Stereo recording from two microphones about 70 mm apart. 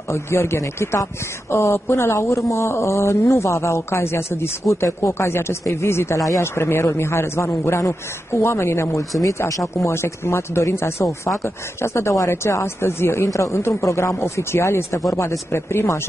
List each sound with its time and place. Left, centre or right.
0.1 s speech: left